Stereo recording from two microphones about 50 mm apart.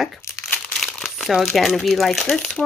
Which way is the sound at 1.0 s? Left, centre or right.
Centre.